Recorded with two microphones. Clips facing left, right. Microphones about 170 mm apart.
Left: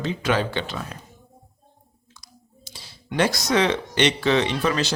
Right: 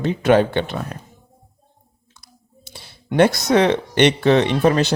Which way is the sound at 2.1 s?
60° right (ahead or behind).